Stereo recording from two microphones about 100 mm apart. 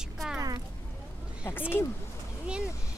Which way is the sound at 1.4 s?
25° left (ahead or behind).